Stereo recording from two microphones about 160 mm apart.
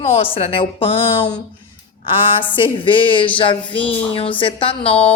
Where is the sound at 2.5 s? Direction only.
30° left (ahead or behind).